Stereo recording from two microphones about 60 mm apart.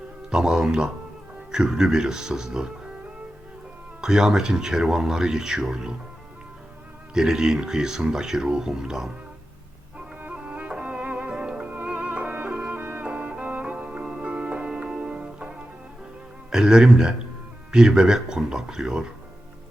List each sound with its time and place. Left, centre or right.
0.3 s speech: centre
4.0 s speech: centre
7.1 s speech: centre
10.2 s music: right
16.5 s speech: centre